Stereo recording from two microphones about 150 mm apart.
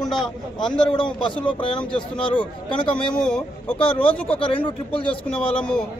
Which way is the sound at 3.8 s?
35° left (ahead or behind).